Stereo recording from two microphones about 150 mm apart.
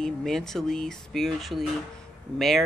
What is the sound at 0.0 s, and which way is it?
Speech, 5° left (ahead or behind).